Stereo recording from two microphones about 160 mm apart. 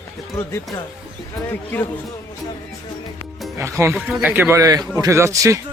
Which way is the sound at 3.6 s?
15° right (ahead or behind).